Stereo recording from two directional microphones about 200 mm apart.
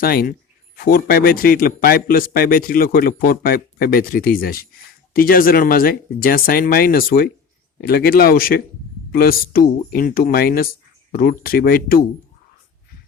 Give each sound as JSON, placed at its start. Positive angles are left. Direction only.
{"t": 0.0, "sound": "a man's voice", "side_deg": 50}